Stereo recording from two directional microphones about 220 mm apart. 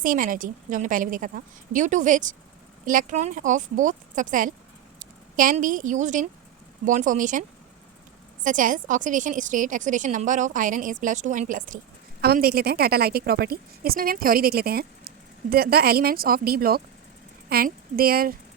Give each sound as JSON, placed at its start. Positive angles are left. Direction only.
{"t": 0.0, "sound": "a woman's voice", "side_deg": -40}
{"t": 8.4, "sound": "a woman's voice", "side_deg": -35}